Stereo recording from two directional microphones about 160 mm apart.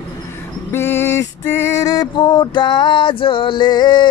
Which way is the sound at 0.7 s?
15° left (ahead or behind).